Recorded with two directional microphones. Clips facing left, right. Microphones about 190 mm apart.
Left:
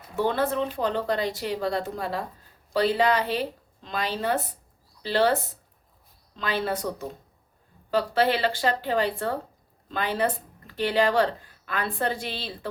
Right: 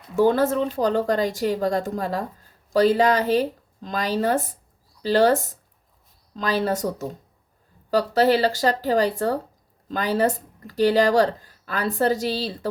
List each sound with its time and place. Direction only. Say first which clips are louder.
0.2 s a woman's voice: right 6 dB; 45° right (ahead or behind)